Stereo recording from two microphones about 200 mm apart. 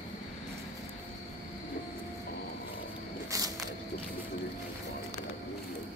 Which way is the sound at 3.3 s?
15° right (ahead or behind).